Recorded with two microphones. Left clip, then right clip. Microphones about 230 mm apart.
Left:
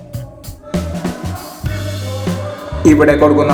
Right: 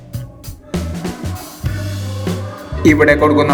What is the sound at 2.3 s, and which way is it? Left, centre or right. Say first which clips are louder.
Music: even; centre.